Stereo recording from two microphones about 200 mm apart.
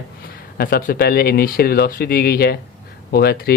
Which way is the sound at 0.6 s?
45° left (ahead or behind).